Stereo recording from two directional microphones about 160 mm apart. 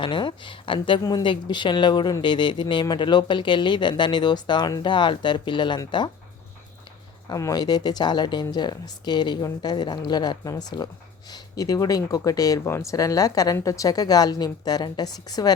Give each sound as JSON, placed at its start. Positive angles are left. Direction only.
{"t": 0.0, "sound": "speech", "side_deg": 30}
{"t": 7.3, "sound": "speech", "side_deg": 20}